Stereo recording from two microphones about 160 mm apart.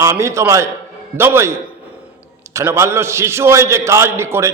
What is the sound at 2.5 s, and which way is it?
A man's voice, 15° right (ahead or behind).